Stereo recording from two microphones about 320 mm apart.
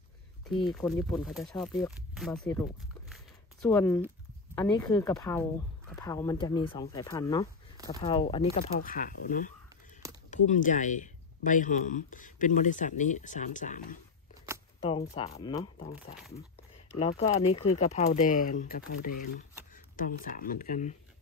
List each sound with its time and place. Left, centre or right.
0.5 s speech: centre
3.7 s speech: centre
16.9 s speech: centre